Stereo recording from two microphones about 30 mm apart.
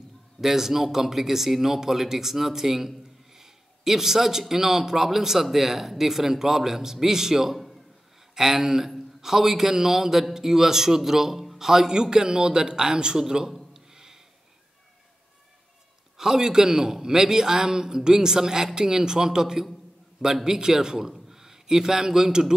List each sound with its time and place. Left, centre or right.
0.4 s a man's voice: centre
13.7 s a sound: centre
16.2 s a man's voice: centre